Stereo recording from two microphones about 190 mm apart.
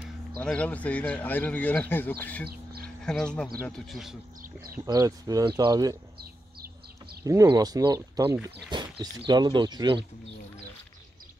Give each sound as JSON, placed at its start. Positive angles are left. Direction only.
{"t": 0.4, "sound": "speech", "side_deg": 5}
{"t": 2.4, "sound": "a sound", "side_deg": -55}
{"t": 3.1, "sound": "a man's voice", "side_deg": 5}
{"t": 4.8, "sound": "speech", "side_deg": -20}
{"t": 7.2, "sound": "speech", "side_deg": -20}